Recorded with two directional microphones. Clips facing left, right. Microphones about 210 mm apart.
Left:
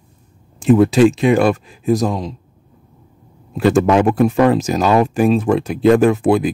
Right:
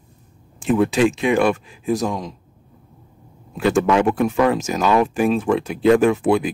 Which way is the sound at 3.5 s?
35° left (ahead or behind).